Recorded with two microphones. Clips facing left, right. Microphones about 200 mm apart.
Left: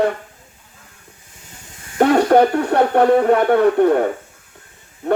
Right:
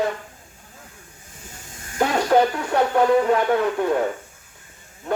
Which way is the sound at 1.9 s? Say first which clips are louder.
Left 6 dB; 60° left (ahead or behind).